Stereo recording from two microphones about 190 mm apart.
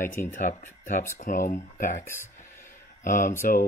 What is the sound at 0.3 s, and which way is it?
Speech, 45° left (ahead or behind).